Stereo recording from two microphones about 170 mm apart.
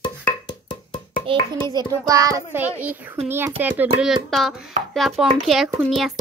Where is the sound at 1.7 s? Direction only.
25° right (ahead or behind).